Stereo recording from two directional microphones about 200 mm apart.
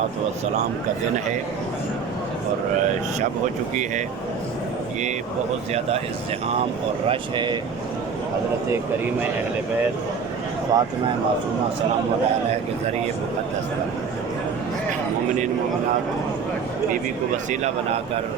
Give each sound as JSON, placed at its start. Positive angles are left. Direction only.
{"t": 7.1, "sound": "speech", "side_deg": -25}
{"t": 10.7, "sound": "speech", "side_deg": -20}
{"t": 17.3, "sound": "speech", "side_deg": -35}